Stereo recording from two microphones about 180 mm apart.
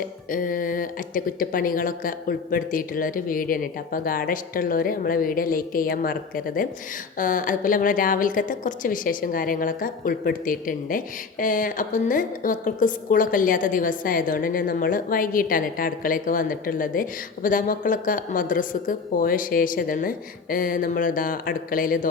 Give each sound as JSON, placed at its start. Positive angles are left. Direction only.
{"t": 0.3, "sound": "a woman's voice", "side_deg": 50}